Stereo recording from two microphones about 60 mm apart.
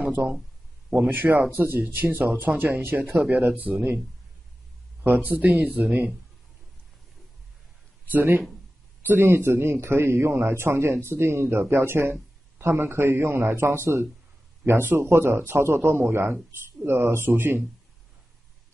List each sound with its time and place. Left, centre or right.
0.2 s speech: centre
1.0 s speech: right
5.0 s speech: right
8.1 s speech: right